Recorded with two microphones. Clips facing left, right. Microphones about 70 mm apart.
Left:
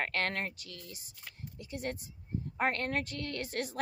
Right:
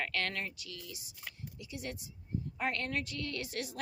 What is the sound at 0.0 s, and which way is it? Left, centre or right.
A woman's voice, left.